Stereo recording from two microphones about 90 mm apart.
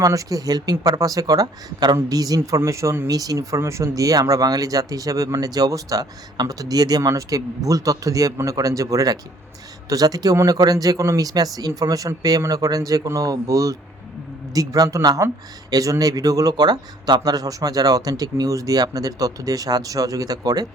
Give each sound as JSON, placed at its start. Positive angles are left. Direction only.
{"t": 0.0, "sound": "speech", "side_deg": -40}
{"t": 3.1, "sound": "speech", "side_deg": -45}